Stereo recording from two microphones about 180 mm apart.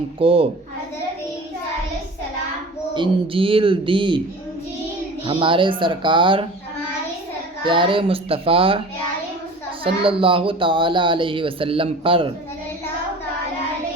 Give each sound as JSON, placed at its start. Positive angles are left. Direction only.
{"t": 0.2, "sound": "a child's voice", "side_deg": -30}
{"t": 2.9, "sound": "speech", "side_deg": -30}
{"t": 5.2, "sound": "speech", "side_deg": -30}
{"t": 7.6, "sound": "speech", "side_deg": -25}
{"t": 9.8, "sound": "speech", "side_deg": -30}